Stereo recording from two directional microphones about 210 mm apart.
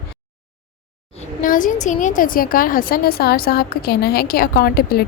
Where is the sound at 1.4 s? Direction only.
40° left (ahead or behind).